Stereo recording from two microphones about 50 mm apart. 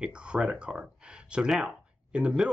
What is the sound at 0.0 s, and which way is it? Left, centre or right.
Speech, right.